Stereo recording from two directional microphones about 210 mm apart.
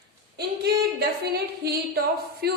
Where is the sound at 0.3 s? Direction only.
50° right (ahead or behind).